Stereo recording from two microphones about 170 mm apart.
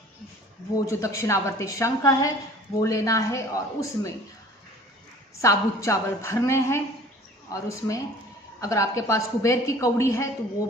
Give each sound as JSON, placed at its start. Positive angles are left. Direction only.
{"t": 0.9, "sound": "a woman's voice", "side_deg": 15}
{"t": 5.4, "sound": "a woman's voice", "side_deg": 20}